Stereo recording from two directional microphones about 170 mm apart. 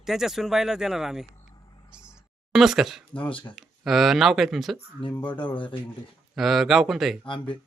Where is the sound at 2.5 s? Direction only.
Centre (ahead or behind).